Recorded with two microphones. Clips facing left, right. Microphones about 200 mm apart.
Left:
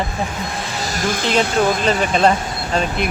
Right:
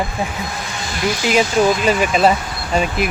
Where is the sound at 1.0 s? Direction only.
50° left (ahead or behind).